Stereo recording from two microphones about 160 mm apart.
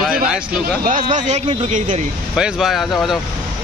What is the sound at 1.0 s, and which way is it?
Speech, 30° right (ahead or behind).